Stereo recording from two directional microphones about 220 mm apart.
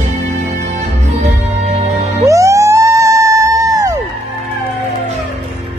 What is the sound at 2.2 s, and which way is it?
Music, 15° right (ahead or behind).